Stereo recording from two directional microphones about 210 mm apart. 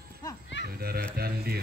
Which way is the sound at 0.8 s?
45° right (ahead or behind).